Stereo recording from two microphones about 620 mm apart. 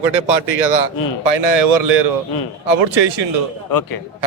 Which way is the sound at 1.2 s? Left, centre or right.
Right.